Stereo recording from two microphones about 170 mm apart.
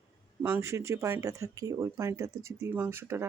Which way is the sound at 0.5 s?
15° right (ahead or behind).